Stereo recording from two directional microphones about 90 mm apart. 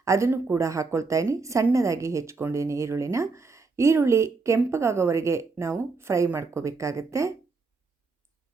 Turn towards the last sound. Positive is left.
turn(degrees=-35)  # may be behind; listen again after turning